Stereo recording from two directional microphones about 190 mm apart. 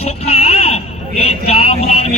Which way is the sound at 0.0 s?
35° left (ahead or behind).